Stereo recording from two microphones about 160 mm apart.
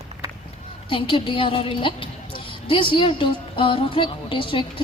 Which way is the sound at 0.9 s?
35° left (ahead or behind).